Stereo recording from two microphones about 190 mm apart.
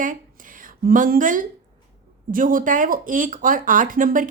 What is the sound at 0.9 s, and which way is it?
Speech, 45° right (ahead or behind).